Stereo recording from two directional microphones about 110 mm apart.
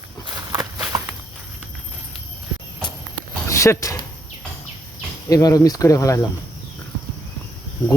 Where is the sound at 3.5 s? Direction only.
25° left (ahead or behind).